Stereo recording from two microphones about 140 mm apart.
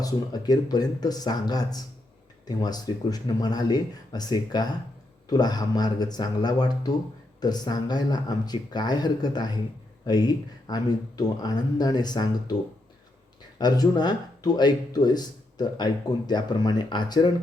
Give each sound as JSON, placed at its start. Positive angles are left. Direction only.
{"t": 0.0, "sound": "speech", "side_deg": 30}
{"t": 13.6, "sound": "speech", "side_deg": 30}